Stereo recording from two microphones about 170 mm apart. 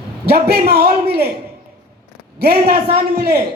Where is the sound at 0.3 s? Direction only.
70° right (ahead or behind).